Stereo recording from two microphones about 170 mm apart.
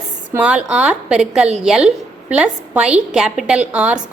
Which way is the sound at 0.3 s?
10° right (ahead or behind).